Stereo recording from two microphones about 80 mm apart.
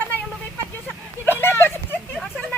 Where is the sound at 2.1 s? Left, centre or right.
Centre.